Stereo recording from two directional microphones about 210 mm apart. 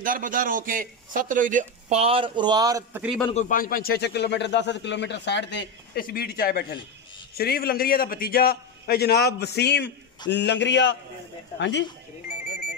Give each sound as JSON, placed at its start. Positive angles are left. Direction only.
{"t": 0.0, "sound": "a man's voice", "side_deg": -40}
{"t": 3.3, "sound": "a man's voice", "side_deg": 35}